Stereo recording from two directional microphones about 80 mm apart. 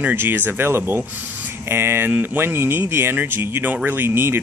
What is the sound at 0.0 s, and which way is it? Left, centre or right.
Speech, right.